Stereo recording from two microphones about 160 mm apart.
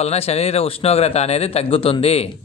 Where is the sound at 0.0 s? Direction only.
40° left (ahead or behind).